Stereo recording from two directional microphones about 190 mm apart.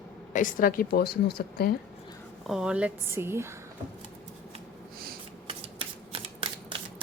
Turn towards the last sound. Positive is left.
turn(degrees=-30)  # may be behind; listen again after turning